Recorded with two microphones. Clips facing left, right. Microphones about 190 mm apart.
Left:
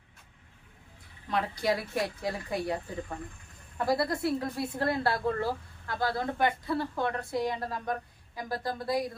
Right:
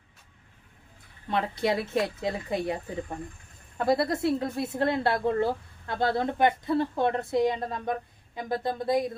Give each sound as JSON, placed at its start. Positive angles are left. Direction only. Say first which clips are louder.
{"t": 1.3, "sound": "a woman's voice", "louder": "right 2 dB", "side_deg": -25}
{"t": 3.8, "sound": "a woman's voice", "louder": "right 3 dB", "side_deg": -25}